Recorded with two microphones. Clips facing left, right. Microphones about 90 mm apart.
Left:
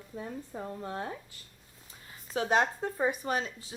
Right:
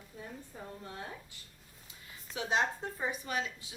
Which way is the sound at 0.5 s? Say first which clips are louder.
Left 8 dB; 60° left (ahead or behind).